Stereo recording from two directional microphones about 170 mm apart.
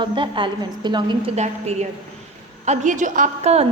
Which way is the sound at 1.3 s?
40° right (ahead or behind).